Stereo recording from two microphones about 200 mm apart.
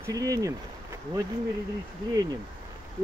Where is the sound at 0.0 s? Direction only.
15° right (ahead or behind).